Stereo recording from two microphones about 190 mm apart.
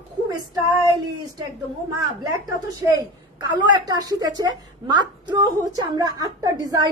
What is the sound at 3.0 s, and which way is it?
A woman's voice, 20° right (ahead or behind).